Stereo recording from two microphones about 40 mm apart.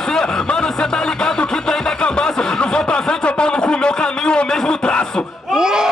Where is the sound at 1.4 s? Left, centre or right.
Left.